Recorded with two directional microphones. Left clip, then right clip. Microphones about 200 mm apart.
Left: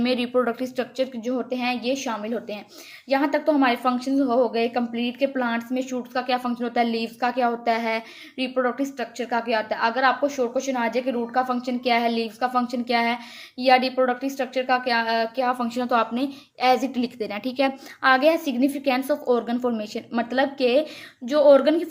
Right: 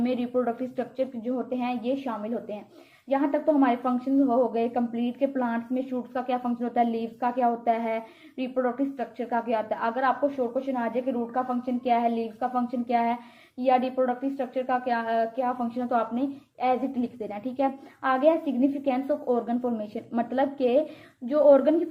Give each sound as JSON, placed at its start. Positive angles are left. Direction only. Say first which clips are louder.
{"t": 0.0, "sound": "a woman's voice", "louder": "left 4 dB", "side_deg": 30}